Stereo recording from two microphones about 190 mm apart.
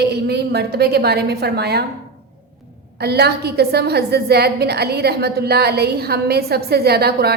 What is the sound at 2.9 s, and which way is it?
A woman's voice, 60° right (ahead or behind).